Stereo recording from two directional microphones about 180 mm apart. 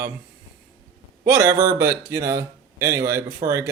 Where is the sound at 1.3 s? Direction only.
20° right (ahead or behind).